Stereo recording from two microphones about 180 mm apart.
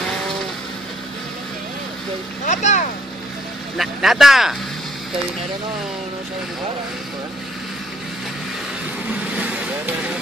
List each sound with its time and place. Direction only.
2.4 s speech: 40° left (ahead or behind)
3.7 s speech: centre (ahead or behind)